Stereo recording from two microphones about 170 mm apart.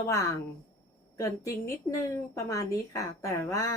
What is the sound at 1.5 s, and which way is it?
A woman's voice, 20° left (ahead or behind).